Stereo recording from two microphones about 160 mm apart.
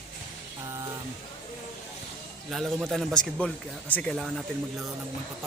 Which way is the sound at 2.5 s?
Centre (ahead or behind).